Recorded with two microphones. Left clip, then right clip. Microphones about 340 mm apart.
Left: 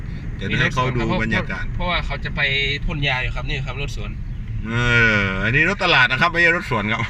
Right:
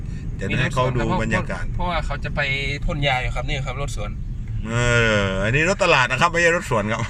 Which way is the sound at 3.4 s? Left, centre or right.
Right.